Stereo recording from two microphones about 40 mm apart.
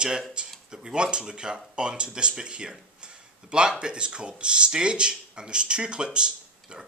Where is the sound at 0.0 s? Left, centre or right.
Right.